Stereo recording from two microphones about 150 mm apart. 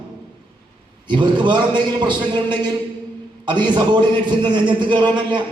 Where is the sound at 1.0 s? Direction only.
30° right (ahead or behind).